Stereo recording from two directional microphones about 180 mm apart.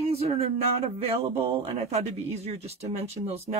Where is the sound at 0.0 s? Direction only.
35° right (ahead or behind).